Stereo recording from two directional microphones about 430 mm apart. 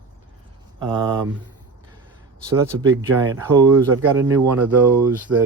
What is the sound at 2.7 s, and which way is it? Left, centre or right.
Speech, right.